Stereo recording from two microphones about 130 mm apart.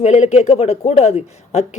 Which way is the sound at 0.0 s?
60° left (ahead or behind).